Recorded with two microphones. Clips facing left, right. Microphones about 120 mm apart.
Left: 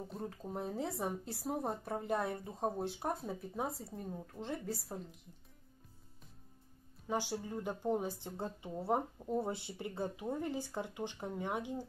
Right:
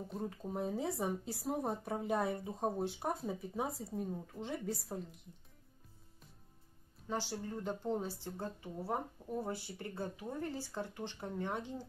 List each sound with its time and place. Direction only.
0.1 s speech: centre (ahead or behind)
7.1 s speech: 15° left (ahead or behind)